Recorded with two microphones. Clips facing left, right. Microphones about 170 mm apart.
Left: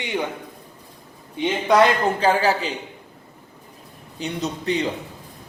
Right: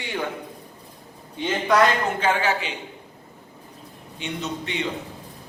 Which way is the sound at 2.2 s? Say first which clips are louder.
Left 4 dB; 35° left (ahead or behind).